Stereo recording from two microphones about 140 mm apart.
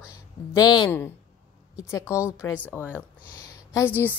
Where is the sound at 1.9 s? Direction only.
20° left (ahead or behind).